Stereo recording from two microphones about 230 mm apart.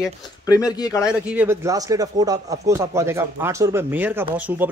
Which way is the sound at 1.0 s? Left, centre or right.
Centre.